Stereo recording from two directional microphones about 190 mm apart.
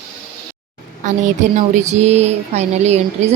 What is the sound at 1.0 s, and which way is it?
Speech, 40° right (ahead or behind).